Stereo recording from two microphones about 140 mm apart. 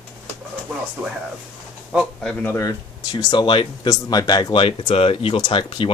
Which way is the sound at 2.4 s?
20° left (ahead or behind).